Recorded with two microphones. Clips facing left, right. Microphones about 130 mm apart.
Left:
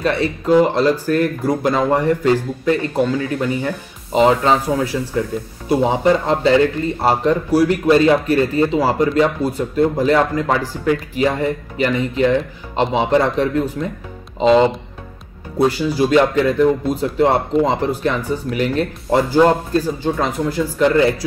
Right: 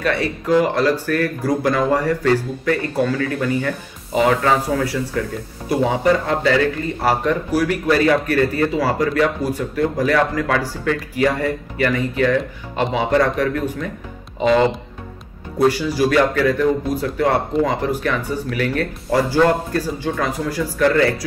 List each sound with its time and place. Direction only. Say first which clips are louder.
0.6 s a man's voice: left 2 dB; 25° left (ahead or behind)